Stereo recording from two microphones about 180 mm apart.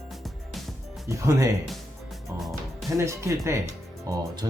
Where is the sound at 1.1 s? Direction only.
15° right (ahead or behind).